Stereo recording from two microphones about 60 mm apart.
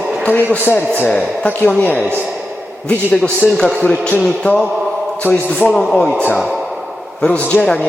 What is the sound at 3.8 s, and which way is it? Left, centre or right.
Speech, centre.